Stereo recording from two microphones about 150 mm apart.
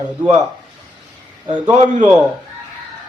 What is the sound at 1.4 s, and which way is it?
Speech, 35° right (ahead or behind).